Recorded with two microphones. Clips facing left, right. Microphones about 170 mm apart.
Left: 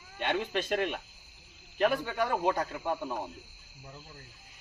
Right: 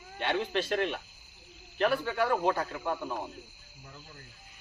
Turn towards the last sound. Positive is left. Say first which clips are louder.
# even
turn(degrees=10)  # may be behind; listen again after turning